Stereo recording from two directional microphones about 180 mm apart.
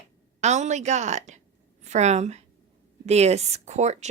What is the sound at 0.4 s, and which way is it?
A woman's voice, 40° right (ahead or behind).